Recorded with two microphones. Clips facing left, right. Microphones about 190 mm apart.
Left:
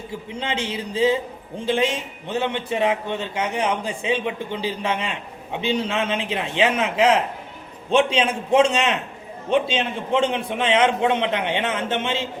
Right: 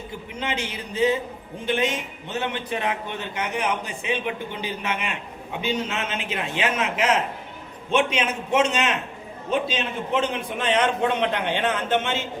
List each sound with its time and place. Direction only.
0.3 s a man's voice: 30° left (ahead or behind)